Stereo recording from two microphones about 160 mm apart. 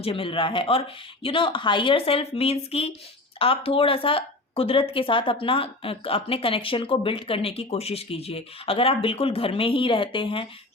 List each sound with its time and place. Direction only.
0.0 s speech: 35° left (ahead or behind)